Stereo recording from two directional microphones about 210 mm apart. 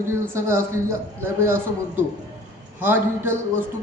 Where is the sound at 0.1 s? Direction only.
10° right (ahead or behind).